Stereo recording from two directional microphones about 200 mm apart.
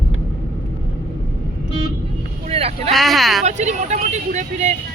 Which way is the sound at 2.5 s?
30° right (ahead or behind).